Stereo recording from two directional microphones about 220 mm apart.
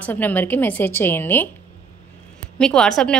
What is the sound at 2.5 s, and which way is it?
Speech, 5° left (ahead or behind).